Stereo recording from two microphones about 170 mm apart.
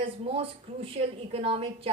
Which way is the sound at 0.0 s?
35° right (ahead or behind).